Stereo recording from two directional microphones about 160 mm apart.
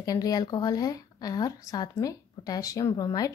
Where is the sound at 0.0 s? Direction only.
25° left (ahead or behind).